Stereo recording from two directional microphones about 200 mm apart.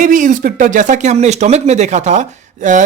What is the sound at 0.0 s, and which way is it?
Speech, 40° right (ahead or behind).